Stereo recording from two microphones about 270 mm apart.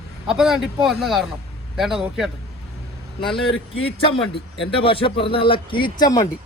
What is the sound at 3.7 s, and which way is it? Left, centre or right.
A man's voice, centre.